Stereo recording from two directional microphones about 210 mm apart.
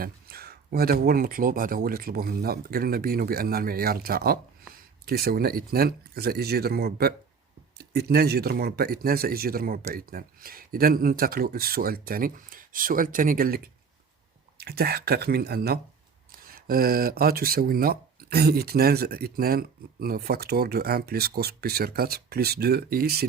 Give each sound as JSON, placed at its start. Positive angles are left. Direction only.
{"t": 0.0, "sound": "speech", "side_deg": -45}
{"t": 14.6, "sound": "speech", "side_deg": -50}